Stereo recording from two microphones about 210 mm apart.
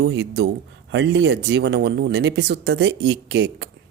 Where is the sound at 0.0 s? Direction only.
55° right (ahead or behind).